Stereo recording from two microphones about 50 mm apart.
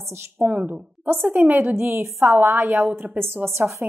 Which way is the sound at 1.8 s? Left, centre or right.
Right.